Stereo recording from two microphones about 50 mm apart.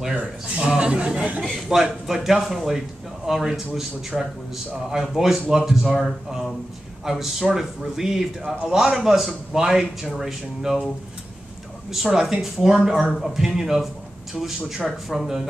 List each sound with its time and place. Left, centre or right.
0.6 s a man's voice: right
1.7 s a man's voice: centre
4.1 s a man's voice: centre
5.0 s a man's voice: centre
11.9 s a man's voice: centre
15.0 s a man's voice: centre